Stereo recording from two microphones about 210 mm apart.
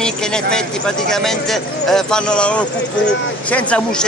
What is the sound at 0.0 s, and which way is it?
Speech, 5° left (ahead or behind).